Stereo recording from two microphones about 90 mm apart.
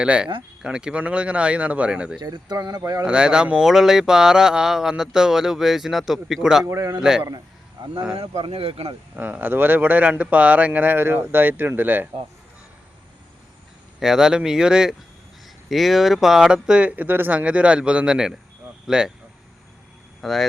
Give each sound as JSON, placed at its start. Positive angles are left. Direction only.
{"t": 0.0, "sound": "speech", "side_deg": -10}
{"t": 2.1, "sound": "speech", "side_deg": -55}
{"t": 3.0, "sound": "speech", "side_deg": -10}
{"t": 6.7, "sound": "speech", "side_deg": -35}
{"t": 7.0, "sound": "speech", "side_deg": -5}
{"t": 7.3, "sound": "a sound", "side_deg": -50}
{"t": 8.4, "sound": "speech", "side_deg": -90}
{"t": 9.1, "sound": "speech", "side_deg": -20}
{"t": 14.0, "sound": "speech", "side_deg": -5}
{"t": 20.2, "sound": "speech", "side_deg": 0}